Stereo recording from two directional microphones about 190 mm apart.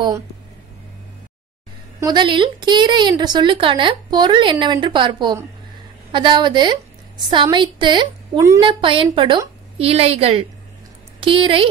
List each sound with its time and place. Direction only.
2.0 s a woman's voice: 20° right (ahead or behind)